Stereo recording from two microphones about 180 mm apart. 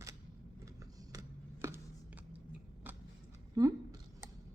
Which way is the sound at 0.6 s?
20° right (ahead or behind).